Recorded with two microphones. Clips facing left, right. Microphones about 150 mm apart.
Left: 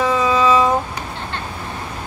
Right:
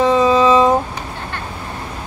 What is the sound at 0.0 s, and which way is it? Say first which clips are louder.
Vehicle: right 4 dB; 30° right (ahead or behind).